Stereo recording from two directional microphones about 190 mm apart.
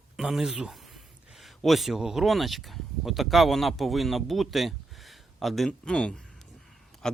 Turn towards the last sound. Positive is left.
turn(degrees=5)  # may be behind; listen again after turning